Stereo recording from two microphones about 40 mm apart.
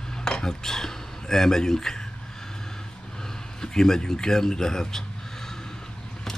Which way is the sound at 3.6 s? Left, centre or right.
Centre.